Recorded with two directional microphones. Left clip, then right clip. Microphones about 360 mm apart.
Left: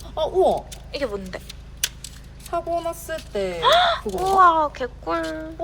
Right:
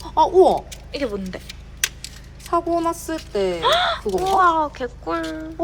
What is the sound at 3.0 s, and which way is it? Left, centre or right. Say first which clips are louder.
Speech: right 4 dB; right.